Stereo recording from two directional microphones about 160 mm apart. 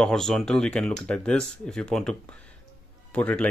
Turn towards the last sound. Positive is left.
turn(degrees=10)  # may be behind; listen again after turning